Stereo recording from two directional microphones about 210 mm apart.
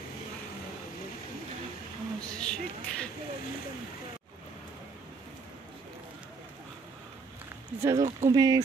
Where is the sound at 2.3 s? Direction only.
5° left (ahead or behind).